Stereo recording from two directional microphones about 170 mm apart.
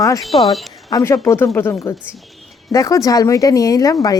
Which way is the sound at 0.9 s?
20° left (ahead or behind).